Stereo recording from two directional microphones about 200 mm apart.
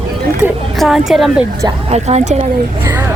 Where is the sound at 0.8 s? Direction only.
Centre (ahead or behind).